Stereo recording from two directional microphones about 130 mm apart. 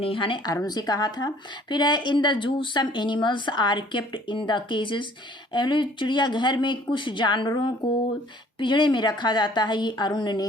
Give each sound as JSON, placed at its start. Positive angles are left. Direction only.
{"t": 0.0, "sound": "speech", "side_deg": 40}